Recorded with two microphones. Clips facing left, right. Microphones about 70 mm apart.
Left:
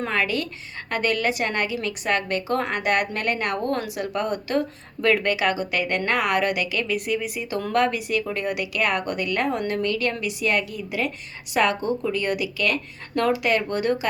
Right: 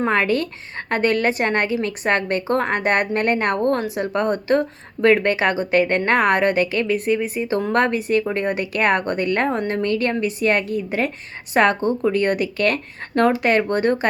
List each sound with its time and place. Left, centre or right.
0.0 s a woman's voice: right